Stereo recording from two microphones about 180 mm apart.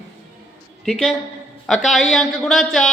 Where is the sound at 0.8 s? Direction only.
Centre (ahead or behind).